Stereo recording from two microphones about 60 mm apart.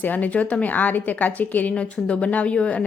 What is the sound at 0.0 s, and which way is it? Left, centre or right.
A woman's voice, left.